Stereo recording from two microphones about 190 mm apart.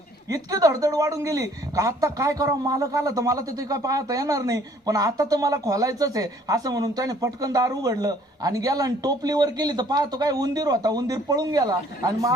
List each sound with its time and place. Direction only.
0.3 s speech: 20° right (ahead or behind)